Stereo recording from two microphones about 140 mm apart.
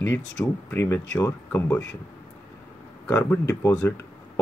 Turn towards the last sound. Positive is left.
turn(degrees=20)  # may be behind; listen again after turning